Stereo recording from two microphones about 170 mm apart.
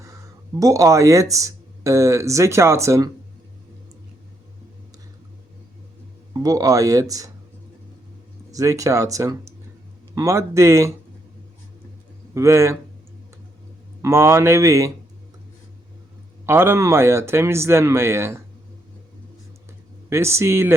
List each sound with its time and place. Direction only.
0.6 s speech: 20° right (ahead or behind)
6.3 s speech: 20° right (ahead or behind)
8.5 s speech: 20° right (ahead or behind)
12.3 s speech: 15° right (ahead or behind)
14.0 s speech: 15° right (ahead or behind)
16.5 s speech: 15° right (ahead or behind)
20.1 s speech: 15° right (ahead or behind)